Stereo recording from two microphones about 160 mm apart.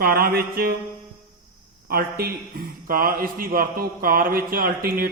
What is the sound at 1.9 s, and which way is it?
A man's voice, 70° right (ahead or behind).